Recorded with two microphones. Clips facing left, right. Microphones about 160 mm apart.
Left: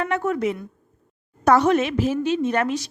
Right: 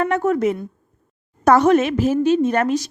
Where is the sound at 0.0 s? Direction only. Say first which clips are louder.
Right 5 dB; 40° right (ahead or behind).